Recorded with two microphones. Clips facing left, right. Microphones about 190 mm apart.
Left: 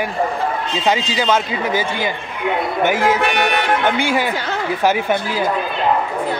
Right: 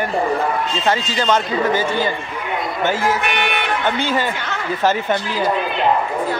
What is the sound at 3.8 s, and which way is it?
Speech, 10° left (ahead or behind).